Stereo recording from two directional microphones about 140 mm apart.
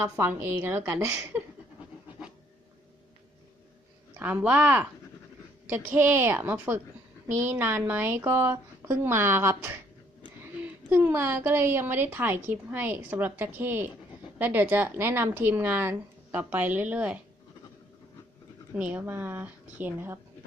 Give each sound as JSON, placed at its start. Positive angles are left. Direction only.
{"t": 0.0, "sound": "a woman's voice", "side_deg": -20}
{"t": 4.2, "sound": "a woman's voice", "side_deg": -10}
{"t": 10.8, "sound": "a woman's voice", "side_deg": -15}
{"t": 18.8, "sound": "a woman's voice", "side_deg": -10}